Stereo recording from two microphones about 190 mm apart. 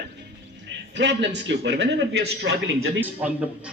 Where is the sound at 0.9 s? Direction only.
65° right (ahead or behind).